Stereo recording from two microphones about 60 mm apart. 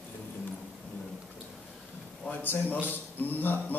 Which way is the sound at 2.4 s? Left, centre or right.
Left.